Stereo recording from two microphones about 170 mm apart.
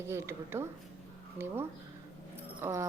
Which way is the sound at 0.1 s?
15° right (ahead or behind).